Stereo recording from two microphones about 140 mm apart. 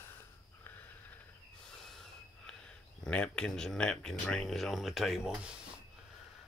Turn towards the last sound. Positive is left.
turn(degrees=-5)  # may be behind; listen again after turning